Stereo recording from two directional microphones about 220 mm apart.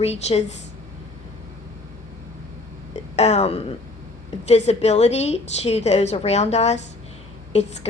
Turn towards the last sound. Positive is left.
turn(degrees=30)  # may be behind; listen again after turning